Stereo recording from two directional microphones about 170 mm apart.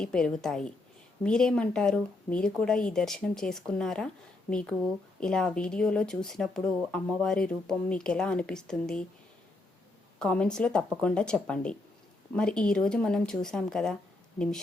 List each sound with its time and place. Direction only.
0.0 s speech: 5° left (ahead or behind)
10.2 s speech: 5° left (ahead or behind)